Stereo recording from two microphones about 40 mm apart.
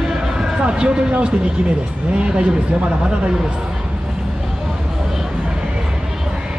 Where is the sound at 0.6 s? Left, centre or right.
Right.